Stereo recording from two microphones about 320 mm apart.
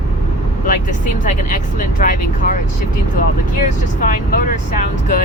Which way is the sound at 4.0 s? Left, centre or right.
Left.